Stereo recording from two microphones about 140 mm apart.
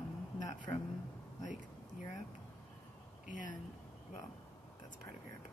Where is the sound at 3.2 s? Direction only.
65° left (ahead or behind).